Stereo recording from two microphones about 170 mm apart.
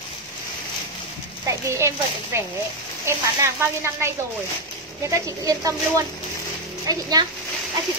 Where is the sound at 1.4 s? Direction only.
15° right (ahead or behind).